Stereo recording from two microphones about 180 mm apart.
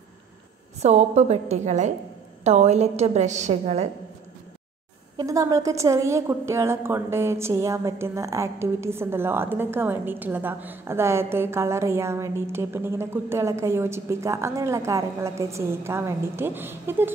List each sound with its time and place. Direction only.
0.8 s a woman's voice: 40° right (ahead or behind)
5.1 s a woman's voice: 20° right (ahead or behind)